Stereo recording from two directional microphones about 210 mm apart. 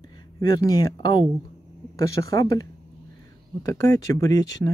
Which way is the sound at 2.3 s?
15° left (ahead or behind).